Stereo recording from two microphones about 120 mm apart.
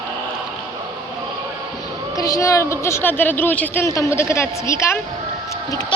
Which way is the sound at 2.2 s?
30° left (ahead or behind).